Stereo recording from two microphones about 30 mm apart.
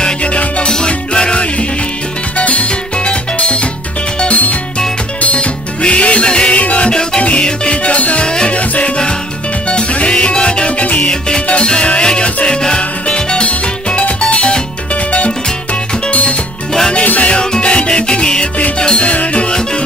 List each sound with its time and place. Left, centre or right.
0.2 s music: left
0.7 s music: left
2.3 s music: left
4.3 s music: left
5.2 s music: left
6.5 s music: left
10.1 s music: left
10.8 s music: left
11.1 s music: left
13.5 s music: left
14.3 s music: left
17.0 s music: left
17.3 s music: left